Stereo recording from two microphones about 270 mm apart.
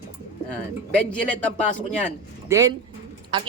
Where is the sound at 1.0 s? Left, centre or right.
Centre.